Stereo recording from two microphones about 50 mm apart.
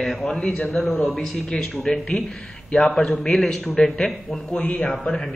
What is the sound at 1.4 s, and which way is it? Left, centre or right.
Speech, centre.